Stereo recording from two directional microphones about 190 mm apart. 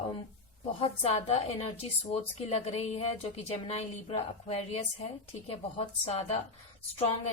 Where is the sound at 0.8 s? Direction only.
35° left (ahead or behind).